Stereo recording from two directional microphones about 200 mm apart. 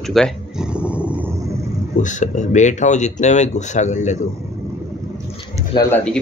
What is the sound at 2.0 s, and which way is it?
Speech, 35° left (ahead or behind).